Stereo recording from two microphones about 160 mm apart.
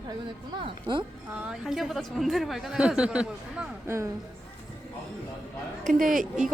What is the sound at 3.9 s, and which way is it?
Speech, 20° right (ahead or behind).